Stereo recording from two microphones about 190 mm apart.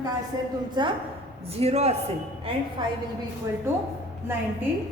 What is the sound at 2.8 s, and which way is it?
Speech, 25° right (ahead or behind).